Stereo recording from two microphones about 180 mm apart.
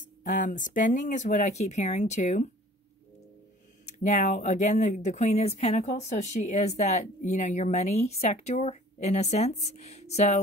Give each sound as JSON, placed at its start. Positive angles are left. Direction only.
{"t": 0.2, "sound": "speech", "side_deg": 45}
{"t": 4.0, "sound": "speech", "side_deg": 45}